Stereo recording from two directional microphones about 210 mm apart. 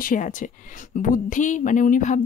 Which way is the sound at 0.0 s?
40° left (ahead or behind).